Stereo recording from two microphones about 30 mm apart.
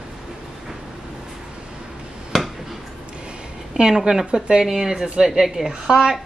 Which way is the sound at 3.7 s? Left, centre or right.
Right.